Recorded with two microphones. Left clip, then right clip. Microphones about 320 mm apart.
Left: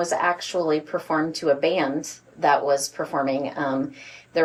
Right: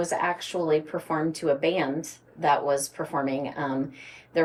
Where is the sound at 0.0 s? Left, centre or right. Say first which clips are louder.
Left 4 dB; centre.